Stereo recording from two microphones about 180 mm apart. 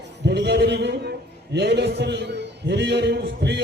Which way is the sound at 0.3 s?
70° right (ahead or behind).